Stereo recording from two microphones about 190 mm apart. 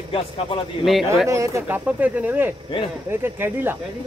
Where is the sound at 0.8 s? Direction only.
Centre (ahead or behind).